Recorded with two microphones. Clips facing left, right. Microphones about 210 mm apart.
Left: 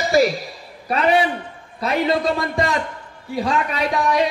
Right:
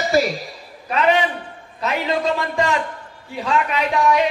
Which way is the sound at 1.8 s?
35° left (ahead or behind).